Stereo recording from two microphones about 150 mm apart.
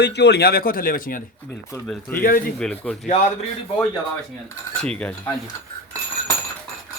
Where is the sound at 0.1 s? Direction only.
90° left; by 1.2 s 70° left (ahead or behind).